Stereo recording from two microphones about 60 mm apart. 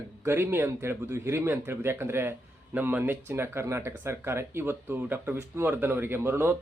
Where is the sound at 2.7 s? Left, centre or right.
Right.